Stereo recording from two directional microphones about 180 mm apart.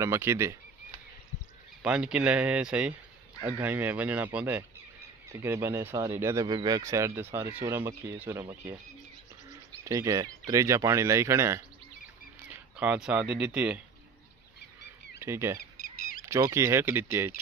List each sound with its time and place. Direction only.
0.0 s speech: 15° right (ahead or behind)
1.8 s speech: 5° right (ahead or behind)
9.8 s speech: 20° right (ahead or behind)
12.7 s speech: 5° right (ahead or behind)
15.1 s speech: 15° right (ahead or behind)
15.8 s a sound: 50° left (ahead or behind)
16.3 s speech: 15° right (ahead or behind)